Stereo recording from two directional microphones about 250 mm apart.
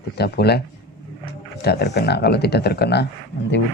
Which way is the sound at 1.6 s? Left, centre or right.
Left.